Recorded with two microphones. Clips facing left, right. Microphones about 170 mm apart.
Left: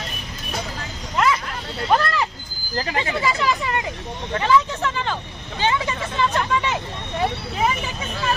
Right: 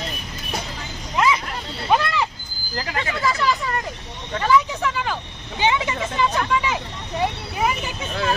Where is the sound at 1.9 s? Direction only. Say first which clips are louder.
Even; 5° right (ahead or behind).